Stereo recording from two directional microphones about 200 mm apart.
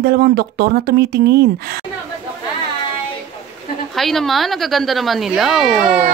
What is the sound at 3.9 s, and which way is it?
A woman's voice, centre (ahead or behind).